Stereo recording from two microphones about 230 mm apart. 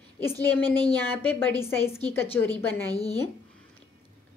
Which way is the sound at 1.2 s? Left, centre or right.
Centre.